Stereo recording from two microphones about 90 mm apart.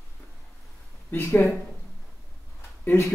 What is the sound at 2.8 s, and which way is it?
Speech, 30° left (ahead or behind).